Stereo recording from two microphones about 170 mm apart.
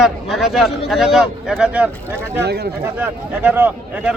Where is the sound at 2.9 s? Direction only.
10° right (ahead or behind).